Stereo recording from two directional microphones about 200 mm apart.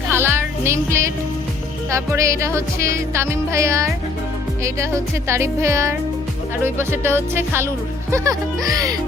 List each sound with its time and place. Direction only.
0.1 s music: 10° right (ahead or behind)